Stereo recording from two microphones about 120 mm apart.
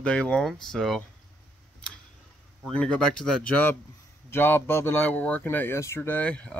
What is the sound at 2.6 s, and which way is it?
Speech, 5° left (ahead or behind).